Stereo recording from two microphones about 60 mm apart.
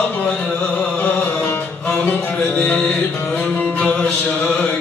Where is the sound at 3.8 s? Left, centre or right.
Left.